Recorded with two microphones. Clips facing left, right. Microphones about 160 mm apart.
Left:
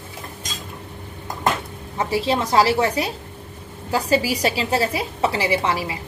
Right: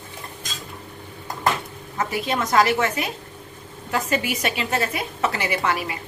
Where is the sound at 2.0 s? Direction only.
30° left (ahead or behind).